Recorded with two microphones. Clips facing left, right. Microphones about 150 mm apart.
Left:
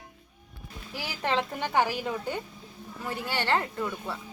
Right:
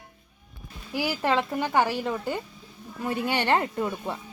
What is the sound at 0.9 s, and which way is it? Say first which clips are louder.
Speech: right 7 dB; 10° right (ahead or behind).